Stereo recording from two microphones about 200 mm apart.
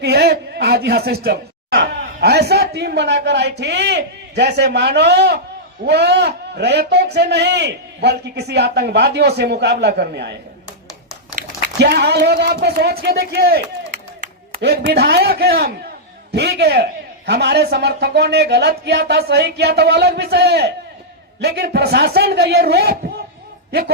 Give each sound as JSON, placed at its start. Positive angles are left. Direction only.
{"t": 0.0, "sound": "a man's voice", "side_deg": -55}
{"t": 11.8, "sound": "a man's voice", "side_deg": -55}